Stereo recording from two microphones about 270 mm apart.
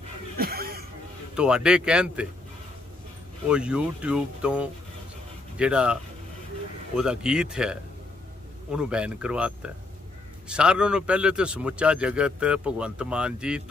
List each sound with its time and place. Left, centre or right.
0.4 s a sound: right
1.3 s a man's voice: centre
3.4 s a man's voice: centre
7.0 s a man's voice: centre